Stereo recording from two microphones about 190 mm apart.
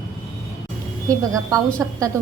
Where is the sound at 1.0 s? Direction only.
15° right (ahead or behind).